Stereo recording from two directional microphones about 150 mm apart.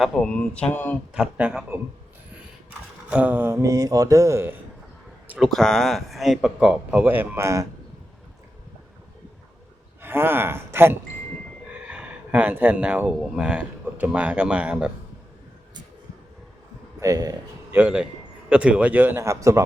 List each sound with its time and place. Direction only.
0.0 s speech: centre (ahead or behind)
1.1 s a man's voice: 10° right (ahead or behind)
3.1 s music: 10° right (ahead or behind)
5.3 s speech: centre (ahead or behind); by 7.7 s 20° right (ahead or behind)
10.0 s speech: 15° right (ahead or behind)
17.0 s a man's voice: 20° right (ahead or behind)
17.7 s a man's voice: 5° right (ahead or behind)